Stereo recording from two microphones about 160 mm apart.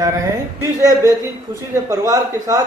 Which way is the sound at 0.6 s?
20° right (ahead or behind).